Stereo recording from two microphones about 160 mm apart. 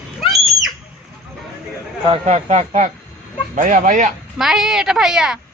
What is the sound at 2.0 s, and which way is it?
Speech, 40° right (ahead or behind).